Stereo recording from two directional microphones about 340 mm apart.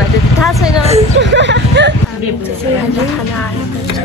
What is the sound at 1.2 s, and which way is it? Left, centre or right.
Speech, right.